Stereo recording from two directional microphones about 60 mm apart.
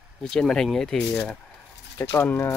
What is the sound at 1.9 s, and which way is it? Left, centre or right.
Speech, left.